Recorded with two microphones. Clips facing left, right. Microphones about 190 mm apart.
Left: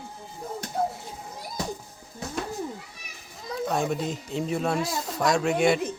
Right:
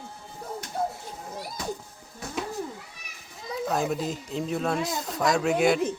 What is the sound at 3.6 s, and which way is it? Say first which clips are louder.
Speech: even; centre (ahead or behind).